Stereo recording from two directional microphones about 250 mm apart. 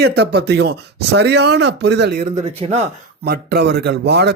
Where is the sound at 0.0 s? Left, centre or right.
Right.